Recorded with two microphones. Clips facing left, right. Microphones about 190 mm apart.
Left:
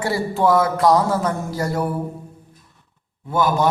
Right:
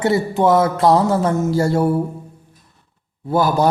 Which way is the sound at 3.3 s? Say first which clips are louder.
Right 3 dB; 35° right (ahead or behind).